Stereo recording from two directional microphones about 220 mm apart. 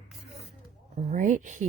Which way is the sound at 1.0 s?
35° right (ahead or behind).